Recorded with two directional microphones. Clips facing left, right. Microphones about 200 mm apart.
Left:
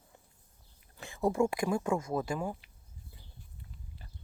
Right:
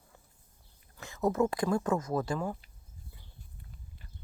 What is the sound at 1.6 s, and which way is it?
Speech, 10° left (ahead or behind).